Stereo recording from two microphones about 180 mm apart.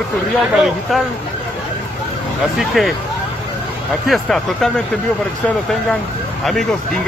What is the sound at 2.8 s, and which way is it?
Speech, centre (ahead or behind).